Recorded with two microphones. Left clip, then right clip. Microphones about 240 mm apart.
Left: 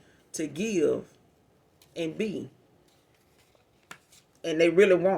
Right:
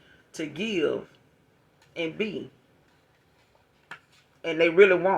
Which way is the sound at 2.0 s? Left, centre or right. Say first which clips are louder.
Right 1 dB; left.